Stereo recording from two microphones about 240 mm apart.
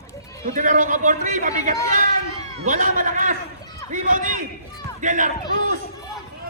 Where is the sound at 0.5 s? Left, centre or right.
Right.